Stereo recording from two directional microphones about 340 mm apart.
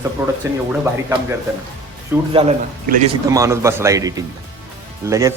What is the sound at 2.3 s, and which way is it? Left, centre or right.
Speech, centre.